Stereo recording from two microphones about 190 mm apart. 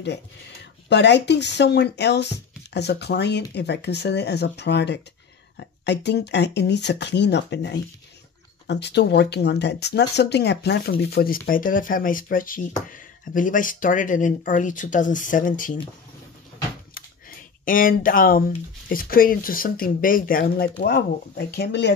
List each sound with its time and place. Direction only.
0.8 s speech: 65° left (ahead or behind); by 15.8 s 45° left (ahead or behind)
17.6 s speech: 45° left (ahead or behind)
20.8 s speech: 60° left (ahead or behind)